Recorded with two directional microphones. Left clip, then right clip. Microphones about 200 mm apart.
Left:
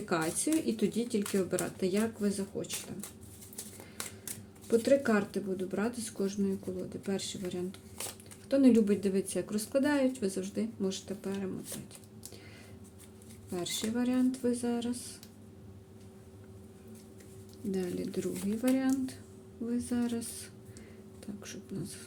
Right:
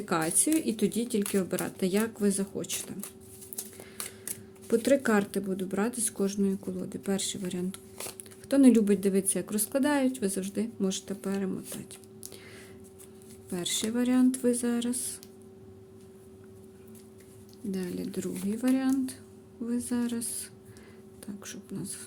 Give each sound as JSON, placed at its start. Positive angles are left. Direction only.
{"t": 0.0, "sound": "speech", "side_deg": -30}
{"t": 4.7, "sound": "a woman's voice", "side_deg": -35}
{"t": 13.5, "sound": "a woman's voice", "side_deg": -30}
{"t": 17.7, "sound": "speech", "side_deg": -15}
{"t": 21.4, "sound": "speech", "side_deg": -20}